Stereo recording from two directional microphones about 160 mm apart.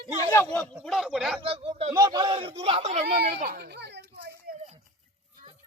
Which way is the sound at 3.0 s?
90° right.